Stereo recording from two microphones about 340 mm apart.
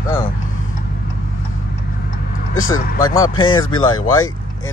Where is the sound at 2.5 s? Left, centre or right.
Left.